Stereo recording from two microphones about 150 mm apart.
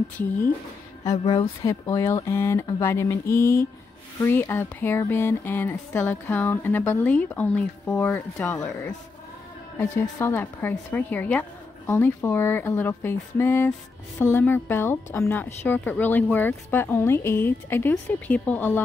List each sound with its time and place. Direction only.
1.1 s speech: 40° left (ahead or behind)
1.6 s speech: 20° left (ahead or behind)